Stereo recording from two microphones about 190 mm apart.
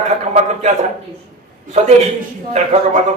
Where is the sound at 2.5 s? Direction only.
35° right (ahead or behind).